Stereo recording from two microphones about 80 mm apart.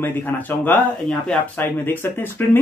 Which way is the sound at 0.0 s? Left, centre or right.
Left.